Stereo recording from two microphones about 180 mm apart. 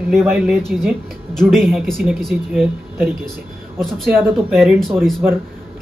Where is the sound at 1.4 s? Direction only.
Centre (ahead or behind).